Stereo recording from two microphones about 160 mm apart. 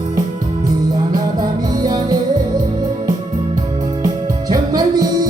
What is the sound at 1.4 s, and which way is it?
Music, 25° right (ahead or behind).